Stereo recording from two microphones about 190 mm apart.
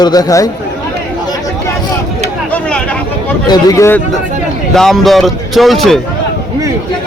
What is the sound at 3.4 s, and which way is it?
Speech, 20° left (ahead or behind).